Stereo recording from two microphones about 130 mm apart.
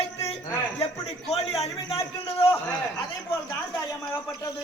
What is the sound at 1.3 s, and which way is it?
Speech, 55° left (ahead or behind).